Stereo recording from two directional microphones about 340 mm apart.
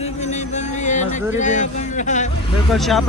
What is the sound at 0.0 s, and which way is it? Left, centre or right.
Music, centre.